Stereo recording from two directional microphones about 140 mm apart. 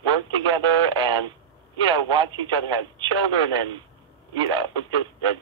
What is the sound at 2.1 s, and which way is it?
Speech, 35° right (ahead or behind).